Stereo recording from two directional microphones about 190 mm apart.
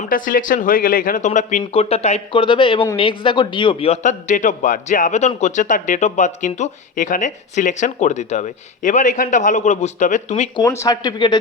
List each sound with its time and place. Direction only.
0.1 s a man's voice: 45° left (ahead or behind)
10.6 s speech: 20° left (ahead or behind)